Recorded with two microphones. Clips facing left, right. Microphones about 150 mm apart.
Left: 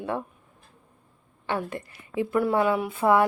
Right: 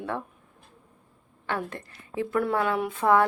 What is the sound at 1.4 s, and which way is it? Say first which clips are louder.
A woman's voice: left 2 dB; 10° left (ahead or behind).